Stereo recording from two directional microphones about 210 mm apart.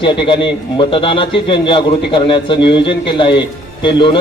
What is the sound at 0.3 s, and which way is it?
A man's voice, 25° left (ahead or behind).